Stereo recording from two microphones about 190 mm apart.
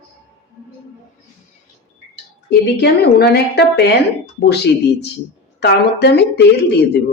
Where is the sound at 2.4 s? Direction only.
60° left (ahead or behind).